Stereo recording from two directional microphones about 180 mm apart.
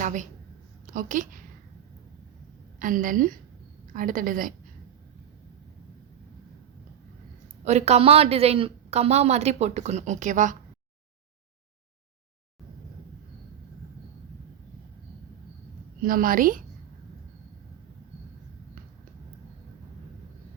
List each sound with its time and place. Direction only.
0.0 s a woman's voice: 45° right (ahead or behind)
2.7 s a woman's voice: 50° right (ahead or behind)
7.6 s speech: 40° right (ahead or behind)
16.0 s a woman's voice: 50° right (ahead or behind)